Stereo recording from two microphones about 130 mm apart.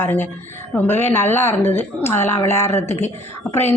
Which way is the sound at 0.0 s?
15° left (ahead or behind).